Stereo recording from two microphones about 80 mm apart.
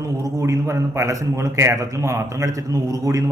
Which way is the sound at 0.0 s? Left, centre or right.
Right.